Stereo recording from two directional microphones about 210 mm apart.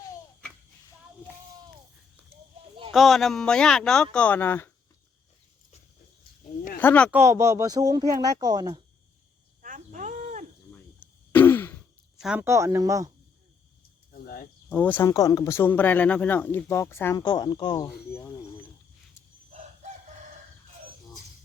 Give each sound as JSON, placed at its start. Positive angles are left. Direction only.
{"t": 2.9, "sound": "speech", "side_deg": 0}
{"t": 6.7, "sound": "speech", "side_deg": 5}
{"t": 7.1, "sound": "speech", "side_deg": -10}
{"t": 9.6, "sound": "cricket", "side_deg": -40}
{"t": 11.3, "sound": "throat clearing", "side_deg": 10}
{"t": 12.2, "sound": "speech", "side_deg": -5}
{"t": 14.1, "sound": "a sound", "side_deg": 45}
{"t": 14.7, "sound": "speech", "side_deg": 5}